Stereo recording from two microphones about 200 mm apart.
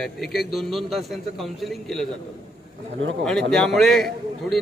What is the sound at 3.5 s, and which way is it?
A man's voice, centre (ahead or behind).